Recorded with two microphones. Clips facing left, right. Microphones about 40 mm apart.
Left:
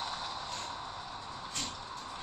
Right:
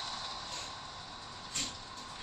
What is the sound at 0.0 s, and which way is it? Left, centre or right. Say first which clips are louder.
Vehicle: left 3 dB; left.